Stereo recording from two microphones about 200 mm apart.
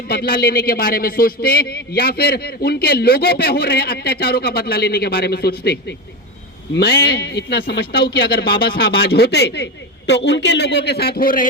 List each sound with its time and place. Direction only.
0.1 s a man's voice: 50° left (ahead or behind)